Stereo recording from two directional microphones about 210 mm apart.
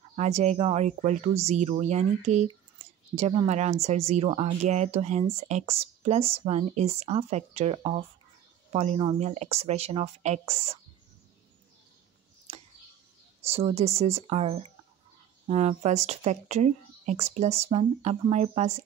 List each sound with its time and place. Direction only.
0.1 s speech: 30° right (ahead or behind)
13.4 s speech: 30° right (ahead or behind)